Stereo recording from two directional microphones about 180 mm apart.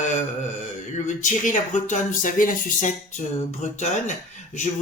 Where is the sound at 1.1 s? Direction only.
45° left (ahead or behind).